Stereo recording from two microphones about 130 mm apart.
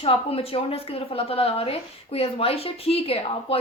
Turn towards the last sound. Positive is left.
turn(degrees=45)  # may be behind; listen again after turning